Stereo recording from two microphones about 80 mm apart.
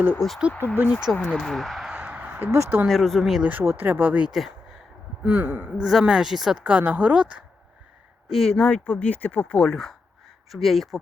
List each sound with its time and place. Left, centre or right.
0.2 s speech: centre
1.1 s speech: left
1.4 s speech: centre
1.9 s a sound: centre
2.5 s speech: right
2.8 s speech: centre
3.6 s speech: right
4.3 s a sound: centre
5.2 s speech: centre
5.7 s speech: centre
8.4 s speech: centre
9.6 s speech: centre